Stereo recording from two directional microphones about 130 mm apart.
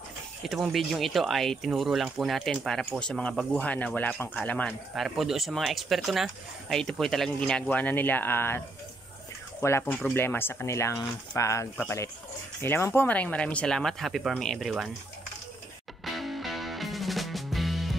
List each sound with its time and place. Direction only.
0.4 s speech: centre (ahead or behind)
4.9 s speech: centre (ahead or behind)
16.2 s music: centre (ahead or behind)